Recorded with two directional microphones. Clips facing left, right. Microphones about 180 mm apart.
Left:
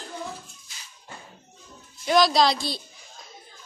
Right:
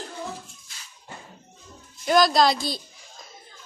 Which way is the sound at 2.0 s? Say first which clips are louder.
Right 1 dB; centre (ahead or behind).